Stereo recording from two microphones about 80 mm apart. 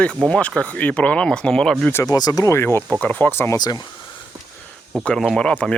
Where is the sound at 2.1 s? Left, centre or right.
Left.